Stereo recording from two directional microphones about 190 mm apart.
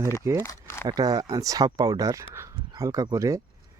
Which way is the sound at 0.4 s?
15° left (ahead or behind).